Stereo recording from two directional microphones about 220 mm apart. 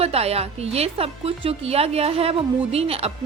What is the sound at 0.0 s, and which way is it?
A woman's voice, 25° right (ahead or behind).